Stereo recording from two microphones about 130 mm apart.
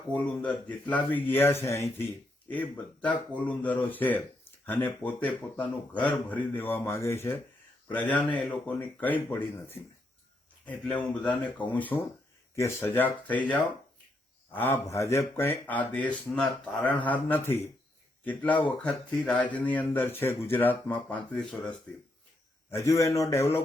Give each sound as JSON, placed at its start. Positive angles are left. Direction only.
{"t": 0.1, "sound": "speech", "side_deg": 10}
{"t": 22.7, "sound": "a man's voice", "side_deg": 20}